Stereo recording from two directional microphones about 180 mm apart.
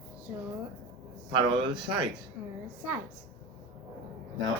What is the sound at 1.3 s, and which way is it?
Speech, 25° right (ahead or behind).